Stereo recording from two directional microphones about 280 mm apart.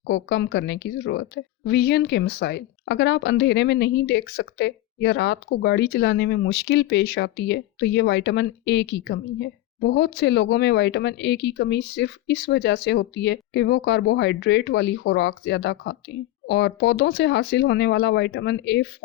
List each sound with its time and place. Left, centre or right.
0.1 s a woman's voice: left